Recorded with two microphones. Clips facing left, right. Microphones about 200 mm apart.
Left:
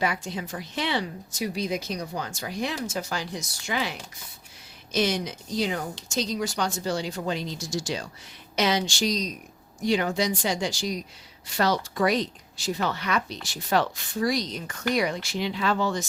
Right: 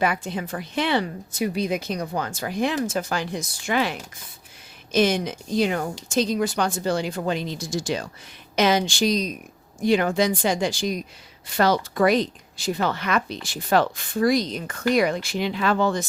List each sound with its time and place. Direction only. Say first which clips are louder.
0.0 s speech: right 4 dB; 55° right (ahead or behind)
4.9 s speech: right 5 dB; 50° right (ahead or behind)